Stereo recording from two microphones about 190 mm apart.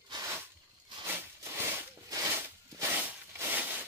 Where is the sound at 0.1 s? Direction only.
15° right (ahead or behind).